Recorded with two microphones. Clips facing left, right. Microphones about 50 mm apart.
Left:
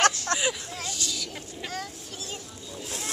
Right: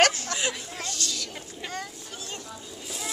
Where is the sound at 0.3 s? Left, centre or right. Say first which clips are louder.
Left 3 dB; left.